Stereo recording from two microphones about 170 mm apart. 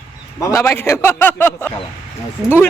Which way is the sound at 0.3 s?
15° left (ahead or behind).